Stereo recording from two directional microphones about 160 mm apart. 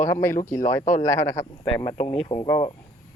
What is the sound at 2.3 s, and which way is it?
Speech, 20° left (ahead or behind).